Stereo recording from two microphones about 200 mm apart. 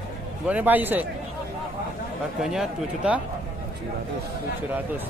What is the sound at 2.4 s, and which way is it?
Speech, 5° right (ahead or behind).